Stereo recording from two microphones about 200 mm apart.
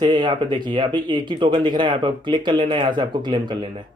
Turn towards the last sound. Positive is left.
turn(degrees=-20)  # may be behind; listen again after turning